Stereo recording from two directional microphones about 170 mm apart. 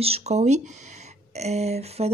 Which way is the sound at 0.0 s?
40° right (ahead or behind).